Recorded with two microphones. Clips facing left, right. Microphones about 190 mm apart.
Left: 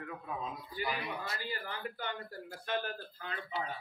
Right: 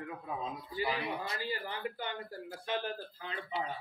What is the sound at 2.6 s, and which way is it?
Speech, 30° right (ahead or behind).